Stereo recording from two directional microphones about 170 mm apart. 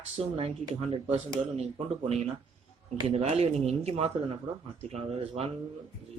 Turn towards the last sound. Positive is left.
turn(degrees=-35)  # may be behind; listen again after turning